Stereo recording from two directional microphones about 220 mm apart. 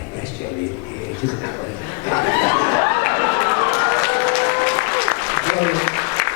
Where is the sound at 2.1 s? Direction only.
20° left (ahead or behind).